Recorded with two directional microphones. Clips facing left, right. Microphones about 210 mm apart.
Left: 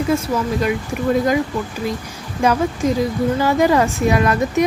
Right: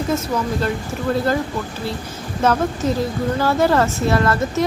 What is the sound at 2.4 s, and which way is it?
Speech, 10° left (ahead or behind).